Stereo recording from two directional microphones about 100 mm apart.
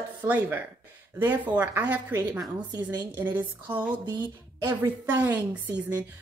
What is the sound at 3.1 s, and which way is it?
A woman's voice, 20° right (ahead or behind).